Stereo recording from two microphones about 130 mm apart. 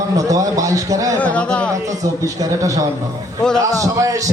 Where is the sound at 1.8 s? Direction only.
25° right (ahead or behind).